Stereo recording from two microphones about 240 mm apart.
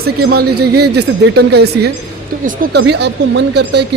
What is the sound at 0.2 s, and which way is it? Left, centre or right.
Speech, right.